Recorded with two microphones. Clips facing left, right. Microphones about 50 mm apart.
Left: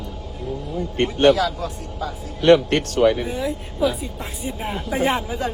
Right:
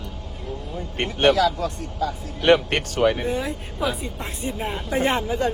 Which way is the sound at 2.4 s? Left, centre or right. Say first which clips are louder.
Left 3 dB; right.